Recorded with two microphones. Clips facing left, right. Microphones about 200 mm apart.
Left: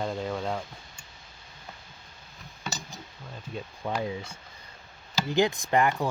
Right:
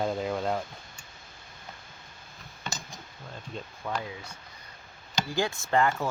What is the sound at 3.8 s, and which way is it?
Speech, 20° left (ahead or behind).